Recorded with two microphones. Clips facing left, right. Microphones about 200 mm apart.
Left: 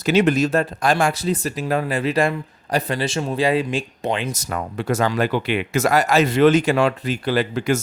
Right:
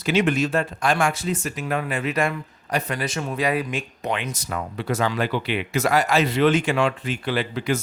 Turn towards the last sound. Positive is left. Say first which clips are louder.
# left 4 dB
turn(degrees=45)  # may be behind; listen again after turning